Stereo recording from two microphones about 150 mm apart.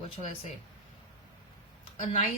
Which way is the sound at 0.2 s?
35° right (ahead or behind).